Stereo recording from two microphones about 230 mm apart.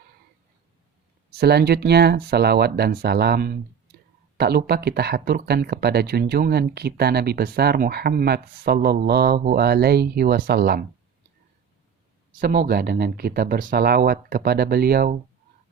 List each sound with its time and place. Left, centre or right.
1.3 s speech: right
12.4 s speech: right